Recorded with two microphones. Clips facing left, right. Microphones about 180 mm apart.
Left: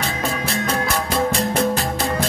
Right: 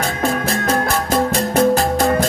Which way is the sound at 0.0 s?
50° right (ahead or behind).